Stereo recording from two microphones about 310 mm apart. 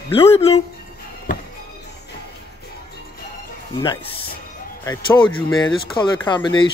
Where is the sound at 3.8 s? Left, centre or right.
Centre.